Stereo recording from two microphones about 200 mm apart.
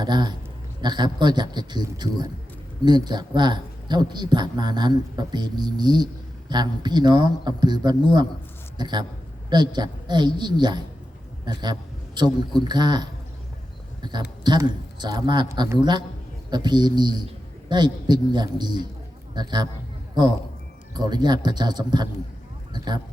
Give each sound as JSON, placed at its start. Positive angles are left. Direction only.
{"t": 0.0, "sound": "speech", "side_deg": -20}
{"t": 14.4, "sound": "a man's voice", "side_deg": -20}
{"t": 20.9, "sound": "speech", "side_deg": -20}